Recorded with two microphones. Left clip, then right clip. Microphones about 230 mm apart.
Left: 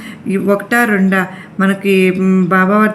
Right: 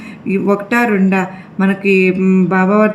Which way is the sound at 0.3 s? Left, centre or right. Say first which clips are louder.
Left 1 dB; centre.